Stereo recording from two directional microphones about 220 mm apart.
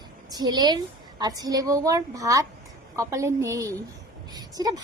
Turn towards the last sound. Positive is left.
turn(degrees=-15)  # may be behind; listen again after turning